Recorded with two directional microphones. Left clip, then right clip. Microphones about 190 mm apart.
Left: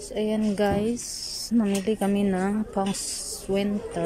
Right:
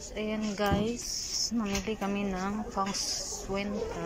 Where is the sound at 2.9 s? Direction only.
70° left (ahead or behind).